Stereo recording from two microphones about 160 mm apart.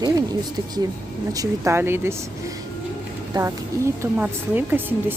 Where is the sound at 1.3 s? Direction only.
20° right (ahead or behind).